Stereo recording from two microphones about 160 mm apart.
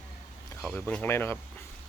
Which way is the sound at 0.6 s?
10° left (ahead or behind).